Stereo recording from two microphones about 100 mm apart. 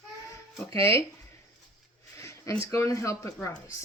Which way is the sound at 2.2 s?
30° left (ahead or behind).